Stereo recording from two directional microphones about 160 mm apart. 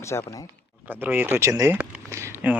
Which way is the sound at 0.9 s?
10° right (ahead or behind).